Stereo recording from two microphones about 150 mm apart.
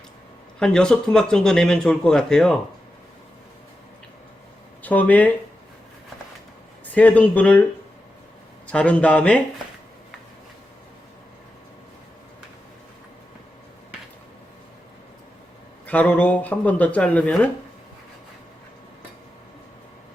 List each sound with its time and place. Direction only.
0.6 s speech: 5° left (ahead or behind)
4.8 s speech: 10° left (ahead or behind)
6.9 s speech: 10° left (ahead or behind)
8.6 s speech: 10° left (ahead or behind)
15.9 s speech: 10° left (ahead or behind)